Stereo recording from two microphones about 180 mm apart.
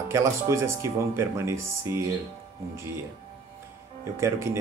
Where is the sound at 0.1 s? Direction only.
15° right (ahead or behind).